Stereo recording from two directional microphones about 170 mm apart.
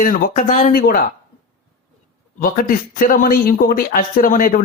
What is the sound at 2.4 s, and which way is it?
Speech, 55° left (ahead or behind).